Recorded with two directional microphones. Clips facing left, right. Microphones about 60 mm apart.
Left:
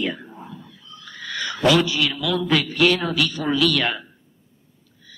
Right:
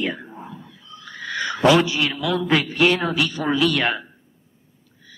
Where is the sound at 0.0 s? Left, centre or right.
Right.